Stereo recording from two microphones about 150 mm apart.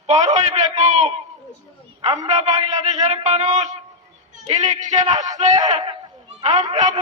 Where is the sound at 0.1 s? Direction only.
50° right (ahead or behind).